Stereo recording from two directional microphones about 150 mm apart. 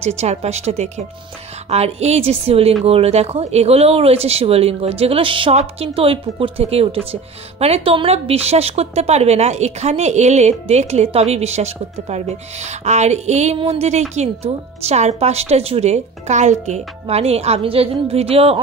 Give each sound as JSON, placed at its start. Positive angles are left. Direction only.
{"t": 0.0, "sound": "speech", "side_deg": -45}